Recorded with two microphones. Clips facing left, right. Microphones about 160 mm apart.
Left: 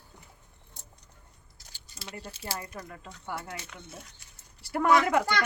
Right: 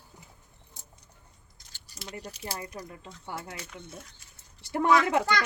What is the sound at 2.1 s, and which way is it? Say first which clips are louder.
Speech: even; 30° left (ahead or behind).